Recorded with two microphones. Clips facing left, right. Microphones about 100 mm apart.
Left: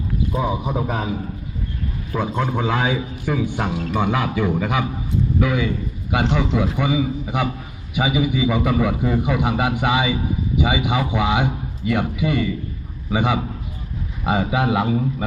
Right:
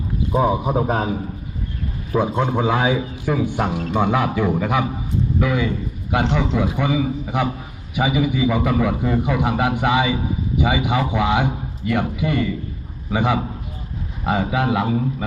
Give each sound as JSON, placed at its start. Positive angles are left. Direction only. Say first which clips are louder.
{"t": 0.5, "sound": "a man's voice", "louder": "right 4 dB", "side_deg": -40}
{"t": 2.1, "sound": "a man's voice", "louder": "right 3 dB", "side_deg": -15}